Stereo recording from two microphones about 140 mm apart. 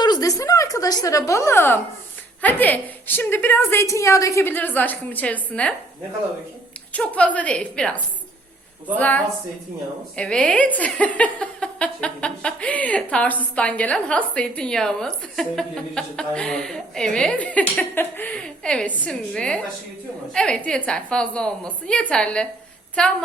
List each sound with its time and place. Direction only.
0.0 s a sound: 25° left (ahead or behind)
2.4 s speech: 10° left (ahead or behind)
6.9 s a woman's voice: 10° left (ahead or behind)